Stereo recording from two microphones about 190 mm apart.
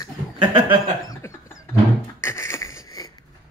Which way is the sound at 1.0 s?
20° left (ahead or behind).